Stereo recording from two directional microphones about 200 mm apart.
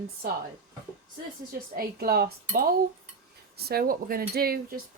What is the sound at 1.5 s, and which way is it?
Speech, 50° right (ahead or behind).